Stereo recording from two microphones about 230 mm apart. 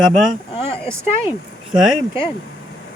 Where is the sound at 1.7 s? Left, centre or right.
Centre.